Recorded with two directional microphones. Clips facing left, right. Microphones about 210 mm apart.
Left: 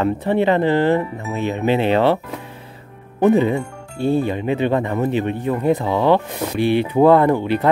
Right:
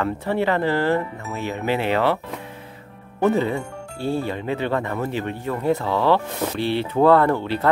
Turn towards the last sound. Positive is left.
turn(degrees=15)  # may be behind; listen again after turning